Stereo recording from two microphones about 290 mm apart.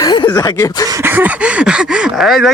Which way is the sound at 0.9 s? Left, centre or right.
Centre.